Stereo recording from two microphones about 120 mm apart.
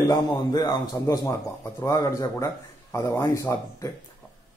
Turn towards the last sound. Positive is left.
turn(degrees=25)  # may be behind; listen again after turning